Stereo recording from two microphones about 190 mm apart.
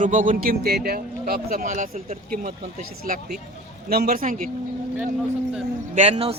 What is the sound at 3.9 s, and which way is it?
Speech, 50° right (ahead or behind).